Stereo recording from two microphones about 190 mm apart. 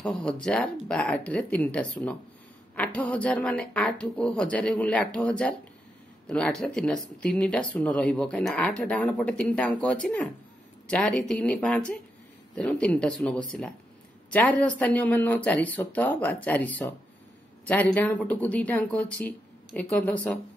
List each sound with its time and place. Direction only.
0.0 s speech: 5° left (ahead or behind)